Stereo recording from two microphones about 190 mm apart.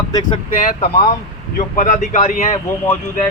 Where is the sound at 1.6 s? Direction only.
40° left (ahead or behind).